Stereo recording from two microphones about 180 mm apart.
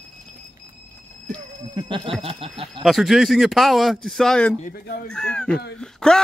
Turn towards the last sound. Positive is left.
turn(degrees=5)  # may be behind; listen again after turning